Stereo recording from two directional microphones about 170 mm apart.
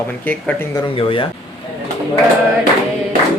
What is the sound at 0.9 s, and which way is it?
Speech, 30° left (ahead or behind).